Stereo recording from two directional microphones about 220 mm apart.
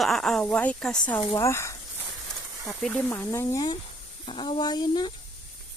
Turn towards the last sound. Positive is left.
turn(degrees=20)  # may be behind; listen again after turning